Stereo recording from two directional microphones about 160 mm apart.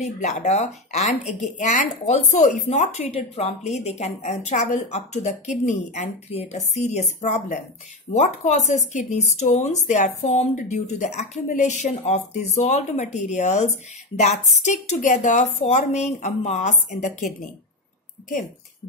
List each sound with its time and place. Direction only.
0.0 s speech: 45° left (ahead or behind)